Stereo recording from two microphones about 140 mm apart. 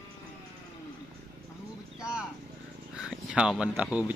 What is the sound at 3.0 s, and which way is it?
Speech, 5° right (ahead or behind).